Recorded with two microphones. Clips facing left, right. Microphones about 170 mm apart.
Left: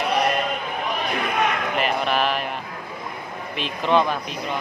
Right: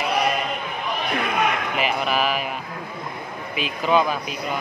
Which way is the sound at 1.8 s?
5° right (ahead or behind).